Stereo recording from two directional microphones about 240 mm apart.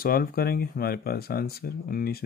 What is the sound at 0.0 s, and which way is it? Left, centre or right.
Speech, left.